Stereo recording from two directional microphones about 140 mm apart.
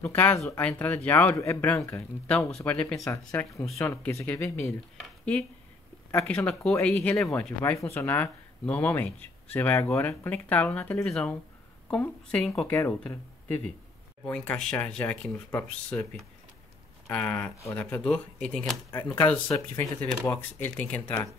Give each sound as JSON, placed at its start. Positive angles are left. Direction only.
{"t": 0.0, "sound": "speech", "side_deg": 15}
{"t": 3.1, "sound": "speech", "side_deg": 20}
{"t": 6.1, "sound": "speech", "side_deg": 10}
{"t": 7.7, "sound": "speech", "side_deg": 20}
{"t": 11.9, "sound": "speech", "side_deg": 15}
{"t": 12.4, "sound": "speech", "side_deg": 0}
{"t": 12.6, "sound": "speech", "side_deg": 15}
{"t": 20.5, "sound": "speech", "side_deg": 10}